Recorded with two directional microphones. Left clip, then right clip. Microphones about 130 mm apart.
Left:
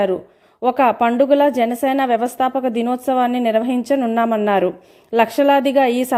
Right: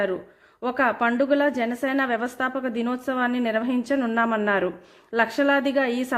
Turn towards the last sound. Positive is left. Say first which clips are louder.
# left 8 dB
turn(degrees=40)  # may be behind; listen again after turning